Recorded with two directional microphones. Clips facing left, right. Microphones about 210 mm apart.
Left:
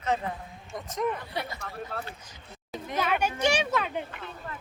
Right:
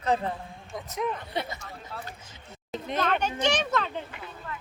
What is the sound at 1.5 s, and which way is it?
Speech, 60° left (ahead or behind).